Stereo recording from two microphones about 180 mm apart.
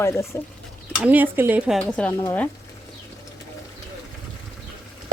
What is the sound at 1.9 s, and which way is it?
Speech, 10° left (ahead or behind).